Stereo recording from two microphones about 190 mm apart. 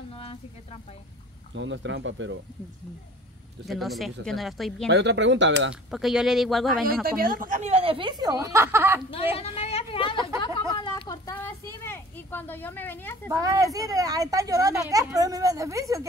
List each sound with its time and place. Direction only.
0.1 s a sound: 30° left (ahead or behind)
1.5 s speech: 70° right (ahead or behind)
3.6 s speech: centre (ahead or behind)
4.8 s speech: 65° right (ahead or behind)
5.9 s speech: centre (ahead or behind)
7.1 s speech: 50° right (ahead or behind); by 9.0 s 10° right (ahead or behind)
9.4 s a sound: 30° left (ahead or behind); by 13.3 s 10° left (ahead or behind)
13.3 s speech: 20° right (ahead or behind)